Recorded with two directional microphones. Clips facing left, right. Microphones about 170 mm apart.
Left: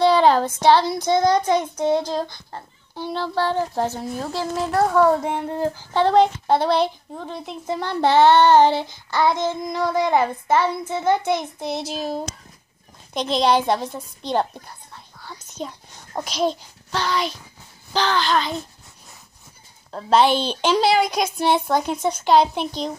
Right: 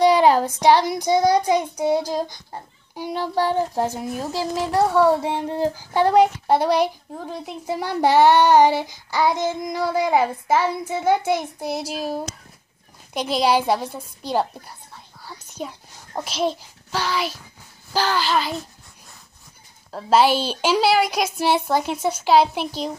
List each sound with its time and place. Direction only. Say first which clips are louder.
0.0 s child singing: even; 10° right (ahead or behind)
13.1 s a child's voice: left 1 dB; 10° right (ahead or behind)
15.6 s child singing: even; 5° right (ahead or behind)
16.2 s a child's voice: left 1 dB; 5° right (ahead or behind)
19.9 s child singing: even; 5° right (ahead or behind)